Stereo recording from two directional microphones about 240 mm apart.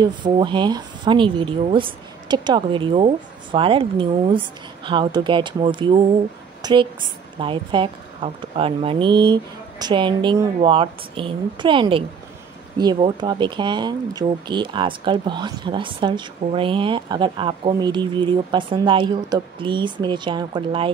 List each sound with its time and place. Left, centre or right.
0.0 s a woman's voice: centre